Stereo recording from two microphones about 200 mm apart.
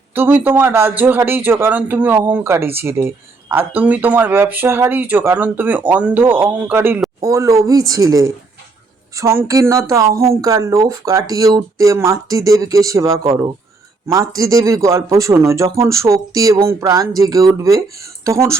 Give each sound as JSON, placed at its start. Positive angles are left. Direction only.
{"t": 0.1, "sound": "speech", "side_deg": -10}